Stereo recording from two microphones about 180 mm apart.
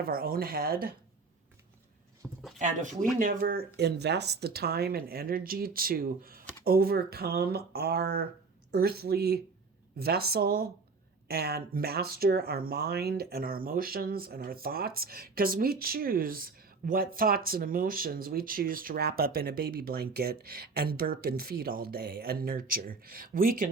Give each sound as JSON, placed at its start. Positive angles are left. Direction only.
{"t": 0.0, "sound": "speech", "side_deg": -55}
{"t": 2.2, "sound": "a sound", "side_deg": -10}
{"t": 2.6, "sound": "speech", "side_deg": -45}